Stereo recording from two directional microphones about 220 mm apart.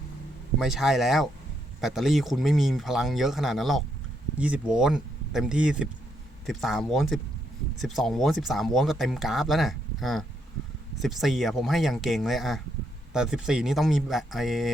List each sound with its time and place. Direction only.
0.6 s speech: centre (ahead or behind)